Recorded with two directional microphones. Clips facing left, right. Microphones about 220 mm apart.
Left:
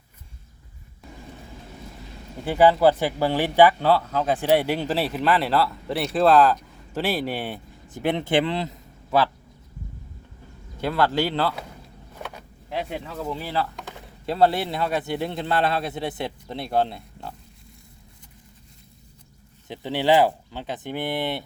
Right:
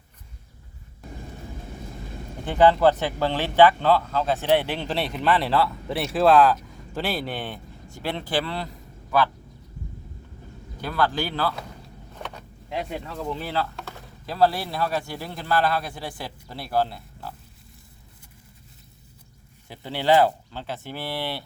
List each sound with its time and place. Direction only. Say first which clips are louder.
2.4 s speech: left 1 dB; 10° left (ahead or behind)
10.8 s a man's voice: left 3 dB; 25° left (ahead or behind)
12.1 s a sound: left 1 dB; 10° left (ahead or behind)
14.3 s a man's voice: left 2 dB; 25° left (ahead or behind)
19.6 s speech: left 2 dB; 20° left (ahead or behind)